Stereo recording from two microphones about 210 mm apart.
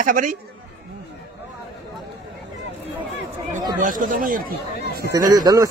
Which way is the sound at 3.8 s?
40° right (ahead or behind).